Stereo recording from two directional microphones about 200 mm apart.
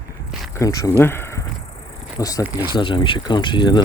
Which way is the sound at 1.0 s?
10° left (ahead or behind).